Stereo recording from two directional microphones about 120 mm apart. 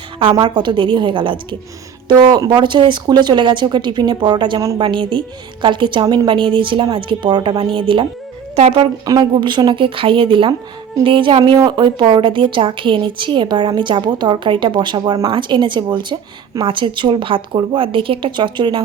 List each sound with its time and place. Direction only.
0.2 s a woman's voice: 50° right (ahead or behind)
9.0 s a woman's voice: 40° right (ahead or behind)